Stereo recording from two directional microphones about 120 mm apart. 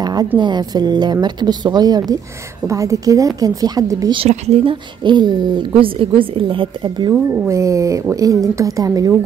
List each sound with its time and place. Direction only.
0.0 s a sound: 35° right (ahead or behind)
0.4 s a woman's voice: 35° right (ahead or behind)
4.3 s speech: 60° right (ahead or behind)
5.0 s a woman's voice: 40° right (ahead or behind)
7.4 s a woman's voice: 25° right (ahead or behind)